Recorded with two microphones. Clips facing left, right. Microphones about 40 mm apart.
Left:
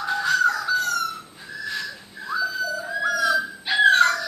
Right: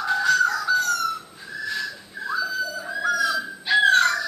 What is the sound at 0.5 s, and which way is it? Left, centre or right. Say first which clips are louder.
Fowl: right 1 dB; centre.